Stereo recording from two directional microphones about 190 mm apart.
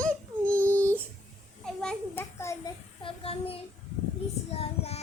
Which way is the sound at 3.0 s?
30° left (ahead or behind).